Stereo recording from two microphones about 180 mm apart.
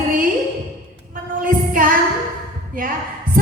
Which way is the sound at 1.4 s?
50° right (ahead or behind).